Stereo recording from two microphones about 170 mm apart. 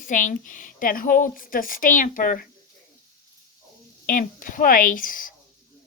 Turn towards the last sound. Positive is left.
turn(degrees=55)  # may be behind; listen again after turning